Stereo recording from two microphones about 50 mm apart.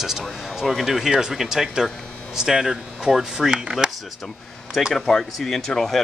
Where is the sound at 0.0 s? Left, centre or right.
Centre.